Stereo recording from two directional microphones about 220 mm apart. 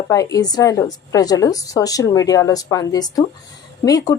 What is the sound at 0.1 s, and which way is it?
A woman's voice, 15° left (ahead or behind).